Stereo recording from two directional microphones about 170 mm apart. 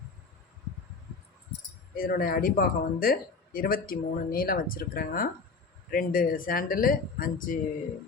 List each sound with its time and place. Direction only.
2.0 s speech: 60° left (ahead or behind)